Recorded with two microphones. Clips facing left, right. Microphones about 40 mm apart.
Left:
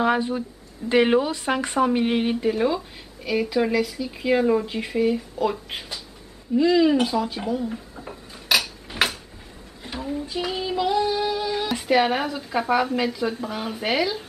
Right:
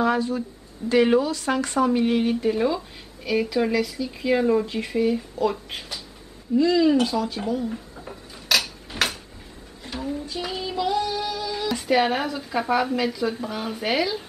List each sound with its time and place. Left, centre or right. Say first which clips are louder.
0.0 s speech: left 1 dB; left
2.4 s speech: even; centre
8.9 s a sound: left 2 dB; centre
10.2 s speech: left 3 dB; centre
11.7 s speech: even; centre